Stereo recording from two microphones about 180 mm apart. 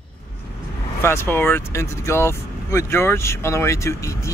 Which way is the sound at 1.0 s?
15° left (ahead or behind).